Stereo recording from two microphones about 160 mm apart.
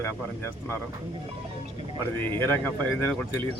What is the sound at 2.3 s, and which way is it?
A man's voice, 15° left (ahead or behind).